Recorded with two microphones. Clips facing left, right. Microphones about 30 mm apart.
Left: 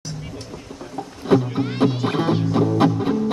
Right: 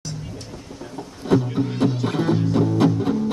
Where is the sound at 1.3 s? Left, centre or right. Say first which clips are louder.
Left 1 dB; left.